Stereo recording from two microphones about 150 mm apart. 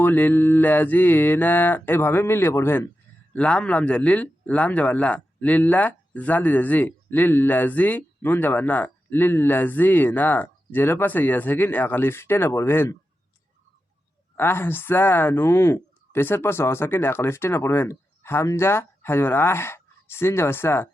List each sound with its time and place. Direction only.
0.0 s speech: 10° left (ahead or behind)
14.3 s speech: 15° left (ahead or behind)